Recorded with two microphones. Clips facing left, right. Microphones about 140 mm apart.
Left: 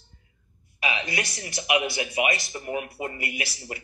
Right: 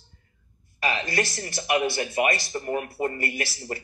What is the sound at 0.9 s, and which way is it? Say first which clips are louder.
Speech: right 4 dB; 5° left (ahead or behind).